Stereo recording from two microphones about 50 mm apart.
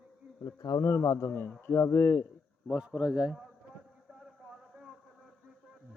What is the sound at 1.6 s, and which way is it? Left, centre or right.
Speech, left.